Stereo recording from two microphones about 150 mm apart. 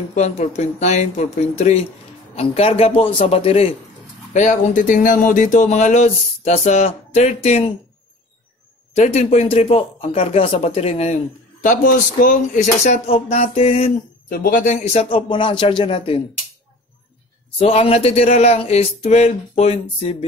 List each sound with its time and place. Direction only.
0.1 s a man's voice: 50° left (ahead or behind)
4.3 s speech: 55° left (ahead or behind)
8.9 s speech: 50° left (ahead or behind)
11.6 s speech: 60° left (ahead or behind); by 13.9 s 40° left (ahead or behind)
14.3 s a man's voice: 70° left (ahead or behind); by 16.2 s 35° left (ahead or behind)
17.6 s speech: 40° left (ahead or behind)